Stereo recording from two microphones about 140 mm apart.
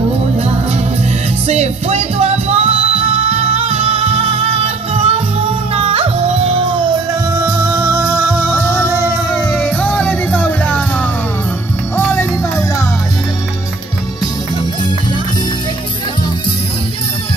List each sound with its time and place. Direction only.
1.5 s music: 50° right (ahead or behind)
7.3 s music: 15° right (ahead or behind)
9.3 s music: 5° left (ahead or behind)